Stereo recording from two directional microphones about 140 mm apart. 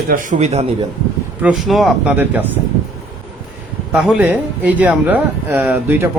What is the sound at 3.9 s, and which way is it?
Speech, 5° right (ahead or behind).